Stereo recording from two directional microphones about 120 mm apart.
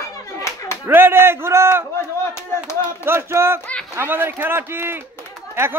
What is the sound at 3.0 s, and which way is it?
A man's voice, 20° right (ahead or behind).